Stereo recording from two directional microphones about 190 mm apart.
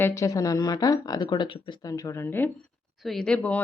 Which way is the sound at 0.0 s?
15° left (ahead or behind).